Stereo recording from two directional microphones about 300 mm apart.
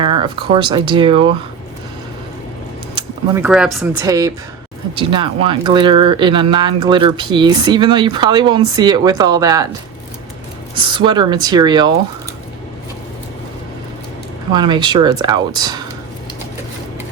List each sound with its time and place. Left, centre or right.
0.0 s speech: centre
2.9 s speech: centre
10.8 s speech: centre
14.5 s speech: centre